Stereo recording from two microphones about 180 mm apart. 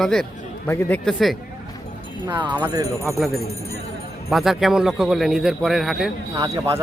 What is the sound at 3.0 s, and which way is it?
A man's voice, centre (ahead or behind).